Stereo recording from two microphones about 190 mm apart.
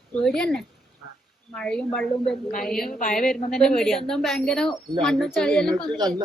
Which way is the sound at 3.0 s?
45° left (ahead or behind).